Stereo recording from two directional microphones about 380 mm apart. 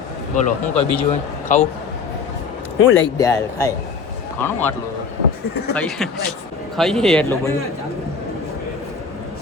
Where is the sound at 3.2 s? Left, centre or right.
Centre.